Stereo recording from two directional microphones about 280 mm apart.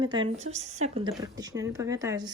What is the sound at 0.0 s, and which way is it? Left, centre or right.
Speech, centre.